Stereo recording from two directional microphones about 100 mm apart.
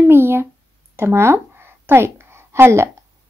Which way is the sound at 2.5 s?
25° right (ahead or behind).